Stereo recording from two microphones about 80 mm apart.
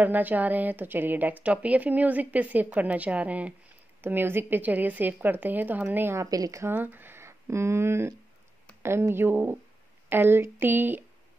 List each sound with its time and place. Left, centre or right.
0.0 s speech: right
6.1 s speech: right
6.6 s speech: right